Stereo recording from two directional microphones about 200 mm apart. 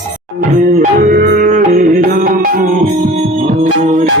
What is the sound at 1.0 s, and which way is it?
Music, 45° right (ahead or behind).